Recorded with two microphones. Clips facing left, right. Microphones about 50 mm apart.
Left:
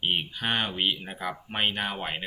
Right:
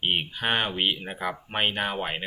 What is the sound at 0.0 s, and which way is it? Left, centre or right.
Speech, centre.